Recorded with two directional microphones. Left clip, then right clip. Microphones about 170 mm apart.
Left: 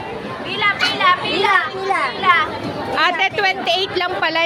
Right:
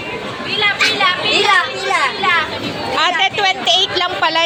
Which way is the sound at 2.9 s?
30° left (ahead or behind).